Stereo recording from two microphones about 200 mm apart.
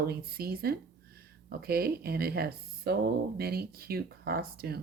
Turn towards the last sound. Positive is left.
turn(degrees=-50)  # may be behind; listen again after turning